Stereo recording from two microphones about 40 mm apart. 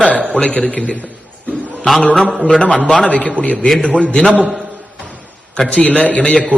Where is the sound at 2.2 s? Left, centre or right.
Right.